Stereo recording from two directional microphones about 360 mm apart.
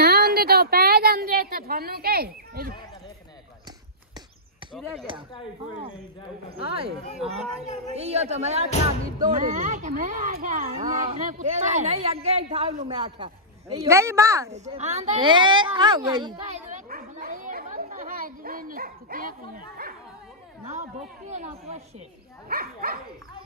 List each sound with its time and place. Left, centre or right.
0.0 s a sound: right
7.9 s a woman's voice: centre
19.8 s dog: right
21.3 s a woman's voice: centre